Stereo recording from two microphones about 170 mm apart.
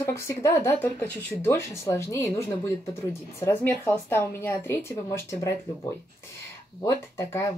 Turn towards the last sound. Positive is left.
turn(degrees=15)  # may be behind; listen again after turning